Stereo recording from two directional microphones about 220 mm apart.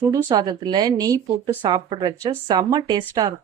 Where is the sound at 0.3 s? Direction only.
20° right (ahead or behind).